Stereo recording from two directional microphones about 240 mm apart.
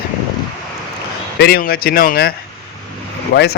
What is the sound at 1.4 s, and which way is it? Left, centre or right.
Speech, left.